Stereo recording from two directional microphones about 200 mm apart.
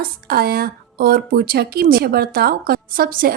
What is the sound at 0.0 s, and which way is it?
A woman's voice, 50° right (ahead or behind).